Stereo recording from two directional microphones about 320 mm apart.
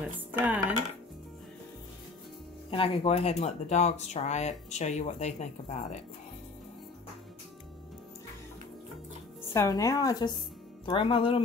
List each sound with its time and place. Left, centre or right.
0.0 s speech: centre
2.7 s speech: centre
9.5 s speech: centre